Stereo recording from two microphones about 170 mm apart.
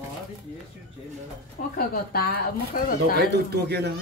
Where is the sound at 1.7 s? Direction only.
60° left (ahead or behind).